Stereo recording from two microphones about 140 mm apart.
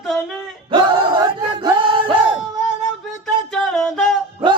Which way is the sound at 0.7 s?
35° right (ahead or behind).